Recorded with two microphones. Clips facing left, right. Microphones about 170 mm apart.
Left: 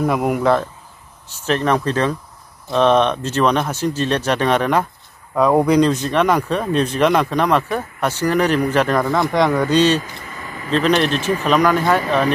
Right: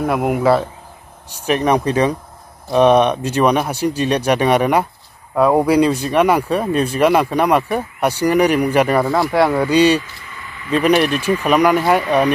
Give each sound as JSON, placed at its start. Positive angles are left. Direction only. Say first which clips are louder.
{"t": 0.0, "sound": "speech", "louder": "right 1 dB", "side_deg": -5}
{"t": 10.0, "sound": "vehicle", "louder": "left 4 dB", "side_deg": 40}
{"t": 10.7, "sound": "speech", "louder": "right 2 dB", "side_deg": -10}